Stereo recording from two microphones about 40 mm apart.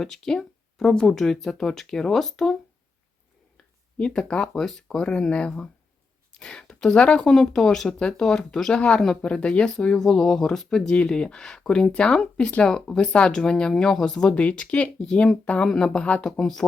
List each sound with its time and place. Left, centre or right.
0.0 s speech: centre
3.9 s speech: left
4.5 s speech: centre
7.2 s speech: centre
10.9 s speech: left
14.3 s speech: left
15.6 s speech: centre
16.2 s speech: centre